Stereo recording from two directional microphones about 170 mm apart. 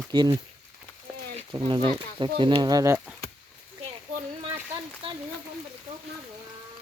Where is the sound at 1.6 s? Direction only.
30° right (ahead or behind).